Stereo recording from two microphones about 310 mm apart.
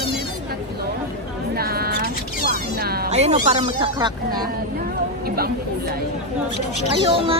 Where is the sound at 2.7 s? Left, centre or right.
Right; by 4.4 s centre.